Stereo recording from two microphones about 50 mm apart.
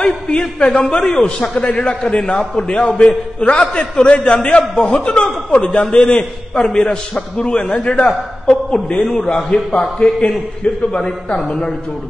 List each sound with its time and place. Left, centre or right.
0.0 s a man's voice: left